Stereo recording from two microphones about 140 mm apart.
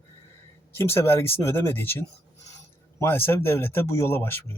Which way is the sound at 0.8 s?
15° left (ahead or behind).